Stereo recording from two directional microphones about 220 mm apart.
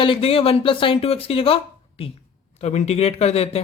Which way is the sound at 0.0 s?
25° left (ahead or behind).